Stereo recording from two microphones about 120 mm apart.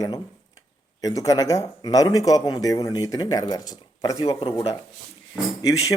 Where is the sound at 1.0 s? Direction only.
30° left (ahead or behind).